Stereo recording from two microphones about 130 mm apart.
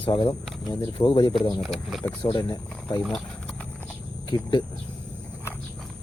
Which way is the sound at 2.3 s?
40° left (ahead or behind).